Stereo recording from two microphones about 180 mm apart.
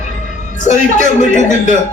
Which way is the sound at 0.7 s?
40° left (ahead or behind).